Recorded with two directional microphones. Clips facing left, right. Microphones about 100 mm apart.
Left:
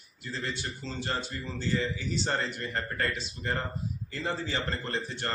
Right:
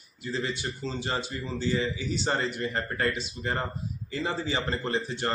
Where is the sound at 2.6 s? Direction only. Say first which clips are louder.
Right 3 dB; 10° right (ahead or behind).